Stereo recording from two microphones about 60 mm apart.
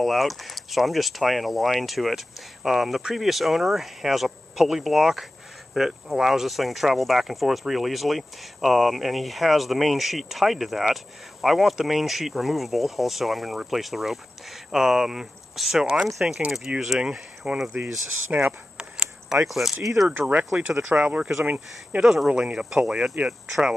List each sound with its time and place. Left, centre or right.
0.0 s speech: centre
18.3 s speech: right
18.8 s a sound: centre
19.4 s speech: centre
20.1 s speech: right
21.2 s speech: centre
22.3 s speech: centre